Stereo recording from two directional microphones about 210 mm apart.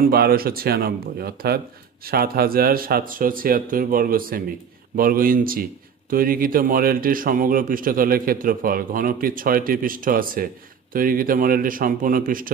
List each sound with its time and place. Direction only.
0.0 s a man's voice: 45° right (ahead or behind)